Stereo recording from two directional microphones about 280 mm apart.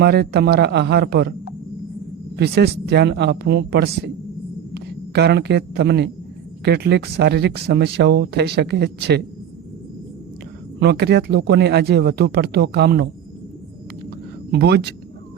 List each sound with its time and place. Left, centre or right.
0.0 s speech: right
2.3 s a man's voice: right
10.8 s speech: right
14.5 s speech: right